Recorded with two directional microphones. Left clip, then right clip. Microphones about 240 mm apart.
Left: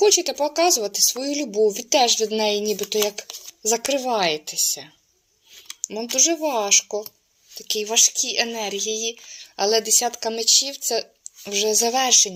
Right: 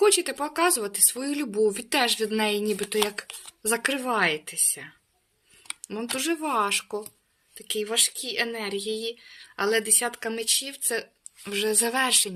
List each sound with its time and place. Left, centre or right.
0.0 s speech: right
6.1 s speech: centre